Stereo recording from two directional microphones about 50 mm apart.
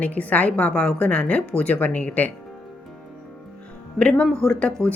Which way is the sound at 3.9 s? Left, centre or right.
Centre.